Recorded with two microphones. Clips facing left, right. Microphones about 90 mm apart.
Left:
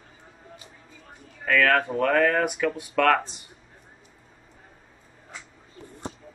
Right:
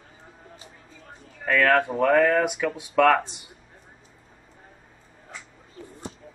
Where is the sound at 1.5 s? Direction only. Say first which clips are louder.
Right 1 dB; 5° right (ahead or behind).